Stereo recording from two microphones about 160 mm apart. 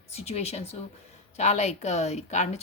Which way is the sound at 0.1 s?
40° left (ahead or behind).